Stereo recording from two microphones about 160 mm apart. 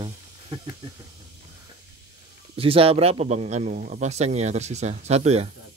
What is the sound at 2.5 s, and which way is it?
Speech, 35° right (ahead or behind).